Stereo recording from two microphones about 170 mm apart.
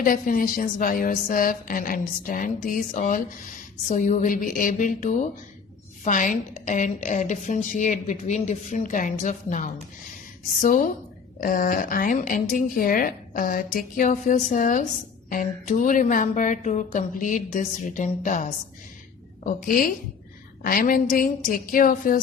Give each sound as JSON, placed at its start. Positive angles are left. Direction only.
{"t": 0.0, "sound": "speech", "side_deg": 55}